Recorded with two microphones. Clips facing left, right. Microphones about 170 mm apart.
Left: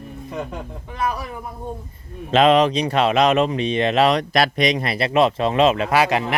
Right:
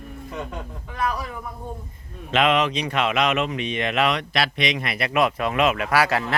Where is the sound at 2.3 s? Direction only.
35° left (ahead or behind).